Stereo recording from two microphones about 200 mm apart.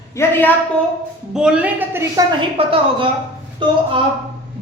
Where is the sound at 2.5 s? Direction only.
25° right (ahead or behind).